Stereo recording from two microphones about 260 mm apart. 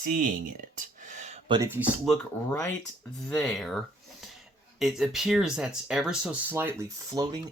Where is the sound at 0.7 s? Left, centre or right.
Right.